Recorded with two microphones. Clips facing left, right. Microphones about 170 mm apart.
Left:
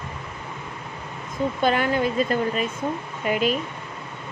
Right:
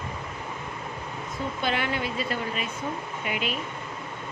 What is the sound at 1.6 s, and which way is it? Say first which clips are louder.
A woman's voice: left 7 dB; 45° left (ahead or behind).